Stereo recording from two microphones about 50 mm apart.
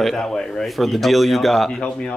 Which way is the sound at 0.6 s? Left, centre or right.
Centre.